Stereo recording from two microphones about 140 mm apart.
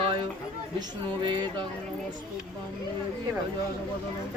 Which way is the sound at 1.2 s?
35° right (ahead or behind).